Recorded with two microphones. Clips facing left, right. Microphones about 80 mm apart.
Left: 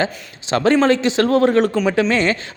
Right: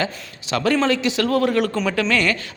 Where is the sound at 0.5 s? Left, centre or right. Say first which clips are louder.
Left 4 dB; left.